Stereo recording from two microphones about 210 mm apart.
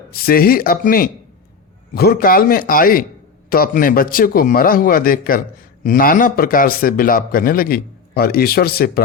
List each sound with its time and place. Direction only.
0.1 s a man's voice: 45° left (ahead or behind)